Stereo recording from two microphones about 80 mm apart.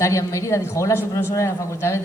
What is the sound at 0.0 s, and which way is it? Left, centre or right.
Speech, left.